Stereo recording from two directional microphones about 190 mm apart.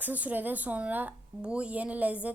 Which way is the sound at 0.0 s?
10° right (ahead or behind).